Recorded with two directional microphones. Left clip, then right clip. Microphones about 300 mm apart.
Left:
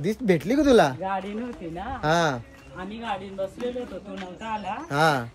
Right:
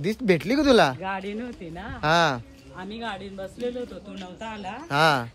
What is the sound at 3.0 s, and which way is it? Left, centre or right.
Speech, centre.